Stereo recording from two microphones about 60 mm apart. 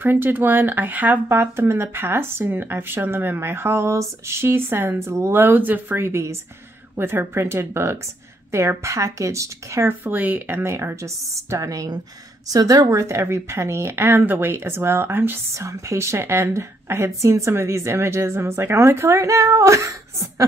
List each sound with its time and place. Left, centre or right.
0.0 s speech: right
4.9 s speech: right
9.8 s speech: right
10.6 s speech: right
12.5 s speech: right
12.9 s speech: right
15.5 s speech: right